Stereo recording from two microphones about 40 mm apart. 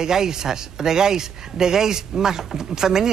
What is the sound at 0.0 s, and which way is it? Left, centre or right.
Speech, centre.